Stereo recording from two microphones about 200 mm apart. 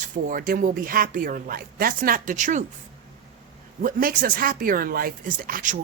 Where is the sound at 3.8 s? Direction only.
45° right (ahead or behind).